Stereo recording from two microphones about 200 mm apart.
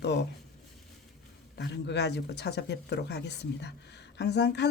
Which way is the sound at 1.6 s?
60° left (ahead or behind).